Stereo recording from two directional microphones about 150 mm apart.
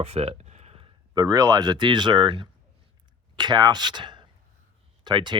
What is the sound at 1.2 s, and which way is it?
Speech, 20° right (ahead or behind).